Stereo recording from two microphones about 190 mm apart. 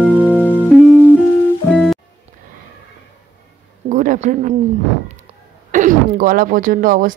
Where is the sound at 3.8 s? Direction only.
40° right (ahead or behind).